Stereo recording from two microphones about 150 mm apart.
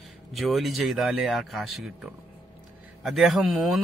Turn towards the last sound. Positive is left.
turn(degrees=0)  # may be behind; listen again after turning